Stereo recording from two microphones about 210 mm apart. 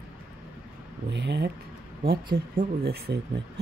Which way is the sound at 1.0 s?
55° right (ahead or behind).